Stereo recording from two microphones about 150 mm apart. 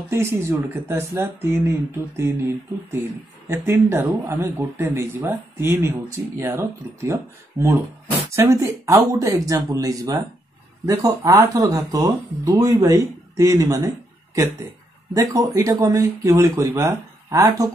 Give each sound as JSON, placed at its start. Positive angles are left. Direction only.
{"t": 0.1, "sound": "speech", "side_deg": -15}